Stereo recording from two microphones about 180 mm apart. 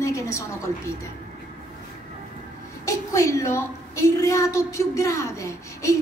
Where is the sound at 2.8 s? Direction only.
15° left (ahead or behind).